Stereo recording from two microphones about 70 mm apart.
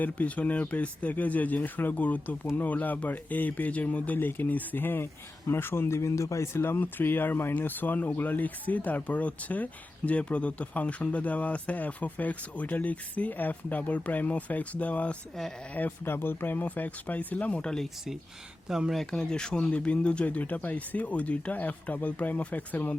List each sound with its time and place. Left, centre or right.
0.0 s speech: left
18.7 s speech: centre; by 23.0 s left